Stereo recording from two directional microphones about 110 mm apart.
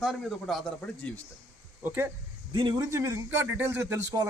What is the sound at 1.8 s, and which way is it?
Speech, 20° right (ahead or behind).